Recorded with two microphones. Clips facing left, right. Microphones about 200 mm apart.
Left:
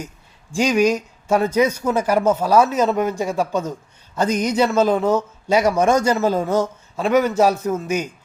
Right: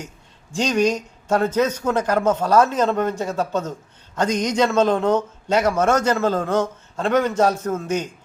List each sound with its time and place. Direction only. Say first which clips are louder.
0.5 s speech: left 2 dB; 10° left (ahead or behind)